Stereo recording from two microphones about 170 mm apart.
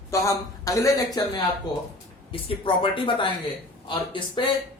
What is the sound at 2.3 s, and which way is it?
A man's voice, 30° left (ahead or behind).